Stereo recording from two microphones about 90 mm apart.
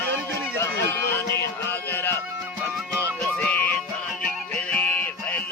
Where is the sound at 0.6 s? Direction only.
30° left (ahead or behind).